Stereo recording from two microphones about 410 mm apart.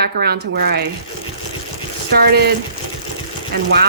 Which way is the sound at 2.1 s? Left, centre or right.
Right.